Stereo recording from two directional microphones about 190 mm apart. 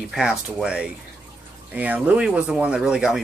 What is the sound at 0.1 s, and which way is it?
Speech, 5° right (ahead or behind).